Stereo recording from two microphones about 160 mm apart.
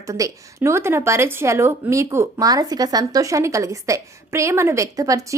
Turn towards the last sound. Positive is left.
turn(degrees=-20)  # may be behind; listen again after turning